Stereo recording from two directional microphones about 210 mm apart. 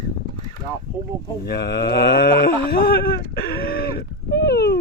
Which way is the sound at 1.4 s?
50° left (ahead or behind).